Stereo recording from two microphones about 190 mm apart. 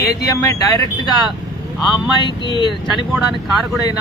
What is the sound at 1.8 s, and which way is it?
Speech, centre (ahead or behind).